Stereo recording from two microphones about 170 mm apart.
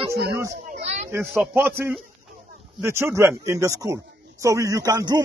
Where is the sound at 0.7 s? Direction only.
40° right (ahead or behind).